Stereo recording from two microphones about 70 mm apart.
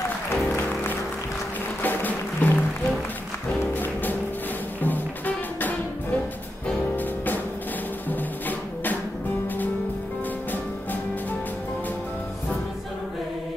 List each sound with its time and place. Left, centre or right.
1.8 s music: left
8.1 s music: left